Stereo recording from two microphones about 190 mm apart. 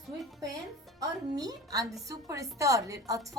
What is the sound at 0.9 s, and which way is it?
A woman's voice, 20° right (ahead or behind).